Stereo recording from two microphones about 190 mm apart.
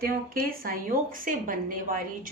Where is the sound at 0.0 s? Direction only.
45° right (ahead or behind).